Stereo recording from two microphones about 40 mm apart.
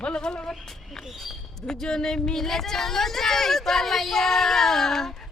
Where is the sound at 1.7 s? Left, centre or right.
Centre.